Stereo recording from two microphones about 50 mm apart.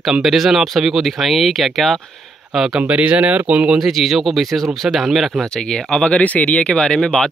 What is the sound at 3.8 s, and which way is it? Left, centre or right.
Speech, centre.